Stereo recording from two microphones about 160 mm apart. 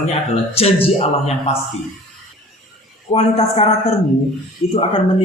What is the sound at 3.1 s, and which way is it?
Speech, 40° left (ahead or behind).